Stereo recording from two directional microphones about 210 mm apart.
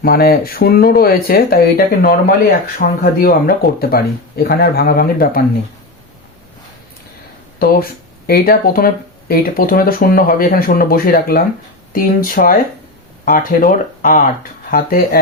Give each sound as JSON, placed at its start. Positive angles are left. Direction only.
{"t": 0.0, "sound": "speech", "side_deg": 45}
{"t": 7.6, "sound": "speech", "side_deg": 45}